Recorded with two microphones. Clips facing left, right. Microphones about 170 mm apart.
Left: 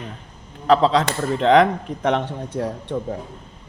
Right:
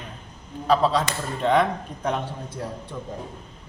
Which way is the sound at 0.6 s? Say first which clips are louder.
Left 4 dB; 75° left (ahead or behind).